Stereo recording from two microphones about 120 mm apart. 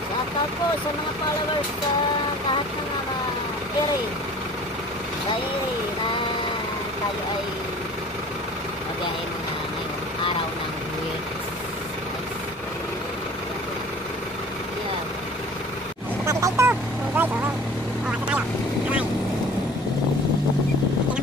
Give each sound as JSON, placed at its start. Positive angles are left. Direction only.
{"t": 16.3, "sound": "vehicle", "side_deg": -25}